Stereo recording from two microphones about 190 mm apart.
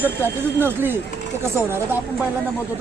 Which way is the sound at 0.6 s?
10° right (ahead or behind).